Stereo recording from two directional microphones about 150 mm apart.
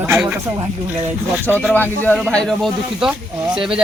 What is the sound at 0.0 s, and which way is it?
Speech, 10° right (ahead or behind).